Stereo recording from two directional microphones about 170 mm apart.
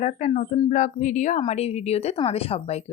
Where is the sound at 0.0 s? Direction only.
45° left (ahead or behind).